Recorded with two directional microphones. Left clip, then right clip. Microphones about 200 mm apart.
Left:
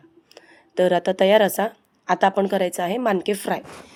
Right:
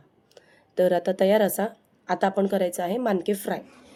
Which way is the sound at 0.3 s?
20° left (ahead or behind).